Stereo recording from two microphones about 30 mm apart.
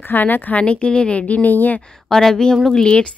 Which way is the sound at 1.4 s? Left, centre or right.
Left.